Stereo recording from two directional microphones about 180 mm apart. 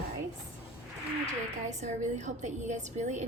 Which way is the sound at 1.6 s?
40° right (ahead or behind).